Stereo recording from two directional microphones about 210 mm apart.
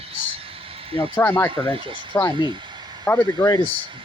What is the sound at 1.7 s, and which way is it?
Speech, 25° right (ahead or behind).